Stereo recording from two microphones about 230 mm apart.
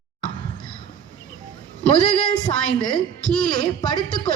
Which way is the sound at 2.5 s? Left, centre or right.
Centre.